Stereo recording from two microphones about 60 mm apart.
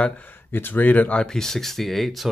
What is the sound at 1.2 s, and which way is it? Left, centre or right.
Speech, centre.